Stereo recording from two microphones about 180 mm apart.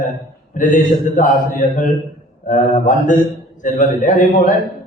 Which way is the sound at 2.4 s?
45° left (ahead or behind).